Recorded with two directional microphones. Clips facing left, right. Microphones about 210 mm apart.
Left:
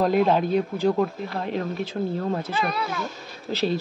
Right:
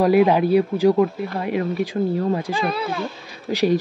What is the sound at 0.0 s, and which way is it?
Speech, 10° right (ahead or behind).